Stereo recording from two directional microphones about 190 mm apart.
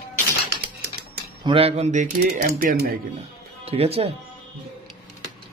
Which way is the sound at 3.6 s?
30° right (ahead or behind).